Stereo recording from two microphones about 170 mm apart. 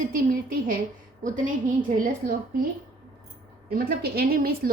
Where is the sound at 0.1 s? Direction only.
55° right (ahead or behind).